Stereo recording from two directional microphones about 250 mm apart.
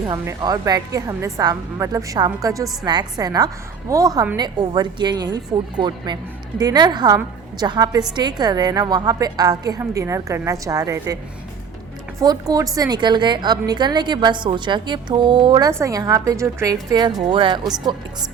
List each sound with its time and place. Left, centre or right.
0.1 s a woman's voice: centre
12.2 s a woman's voice: centre